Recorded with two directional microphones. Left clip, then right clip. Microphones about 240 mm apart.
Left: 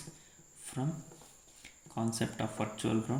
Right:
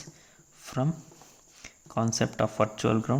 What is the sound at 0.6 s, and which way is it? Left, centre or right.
Cricket, right.